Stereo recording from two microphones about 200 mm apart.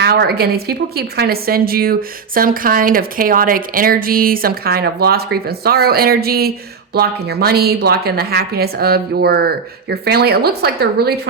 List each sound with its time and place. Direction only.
0.0 s a woman's voice: 55° right (ahead or behind)